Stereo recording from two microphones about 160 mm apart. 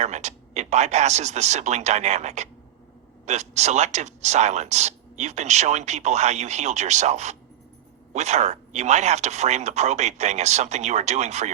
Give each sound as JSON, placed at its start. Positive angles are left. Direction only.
{"t": 0.0, "sound": "speech", "side_deg": -45}